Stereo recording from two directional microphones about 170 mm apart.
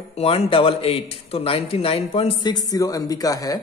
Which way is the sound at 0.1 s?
35° left (ahead or behind).